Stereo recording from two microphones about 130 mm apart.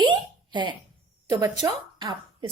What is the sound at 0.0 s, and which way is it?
Hiccup, 40° right (ahead or behind).